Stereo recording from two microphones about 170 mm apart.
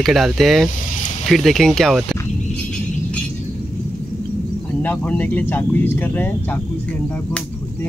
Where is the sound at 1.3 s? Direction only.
Centre (ahead or behind).